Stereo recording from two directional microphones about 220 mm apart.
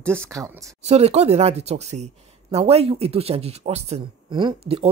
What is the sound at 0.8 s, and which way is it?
Speech, 30° right (ahead or behind).